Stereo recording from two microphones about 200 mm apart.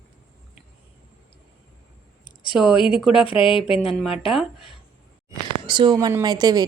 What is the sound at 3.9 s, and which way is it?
Speech, centre (ahead or behind).